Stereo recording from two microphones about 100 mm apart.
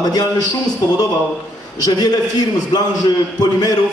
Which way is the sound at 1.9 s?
40° left (ahead or behind).